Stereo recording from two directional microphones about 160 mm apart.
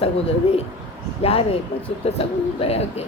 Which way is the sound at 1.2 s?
40° left (ahead or behind).